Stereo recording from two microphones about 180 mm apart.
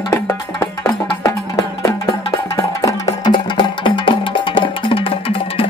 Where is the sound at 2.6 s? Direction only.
20° left (ahead or behind).